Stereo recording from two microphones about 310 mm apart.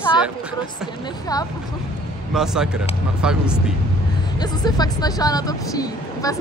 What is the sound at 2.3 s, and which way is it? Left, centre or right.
Speech, centre.